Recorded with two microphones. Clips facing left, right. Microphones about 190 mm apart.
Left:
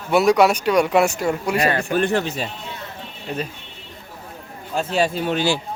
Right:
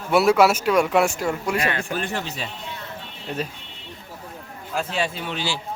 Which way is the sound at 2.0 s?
55° left (ahead or behind).